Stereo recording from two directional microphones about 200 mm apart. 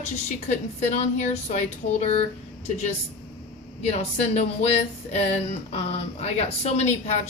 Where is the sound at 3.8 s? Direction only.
35° left (ahead or behind).